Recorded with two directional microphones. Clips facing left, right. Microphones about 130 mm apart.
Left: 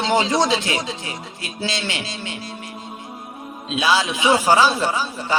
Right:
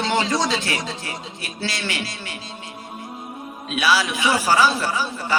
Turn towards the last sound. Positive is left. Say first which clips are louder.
# left 1 dB
turn(degrees=25)  # may be behind; listen again after turning